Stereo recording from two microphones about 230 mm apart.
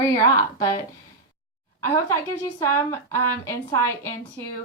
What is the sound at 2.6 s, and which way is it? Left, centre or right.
A woman's voice, centre.